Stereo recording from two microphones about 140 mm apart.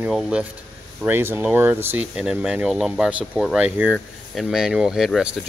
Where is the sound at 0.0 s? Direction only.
5° right (ahead or behind).